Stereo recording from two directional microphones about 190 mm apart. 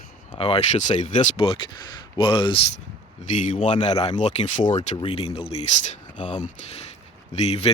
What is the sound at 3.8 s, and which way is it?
Speech, 30° left (ahead or behind).